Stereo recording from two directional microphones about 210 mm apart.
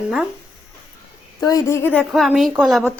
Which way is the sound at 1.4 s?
15° left (ahead or behind).